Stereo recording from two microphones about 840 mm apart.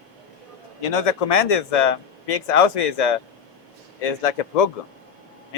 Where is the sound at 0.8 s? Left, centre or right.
Left.